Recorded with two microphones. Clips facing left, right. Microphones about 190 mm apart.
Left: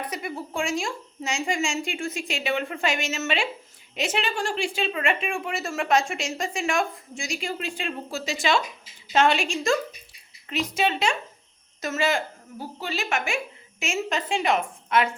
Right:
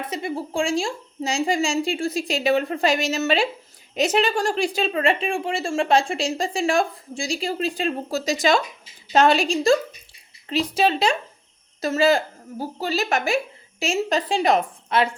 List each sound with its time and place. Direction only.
0.1 s speech: 30° right (ahead or behind)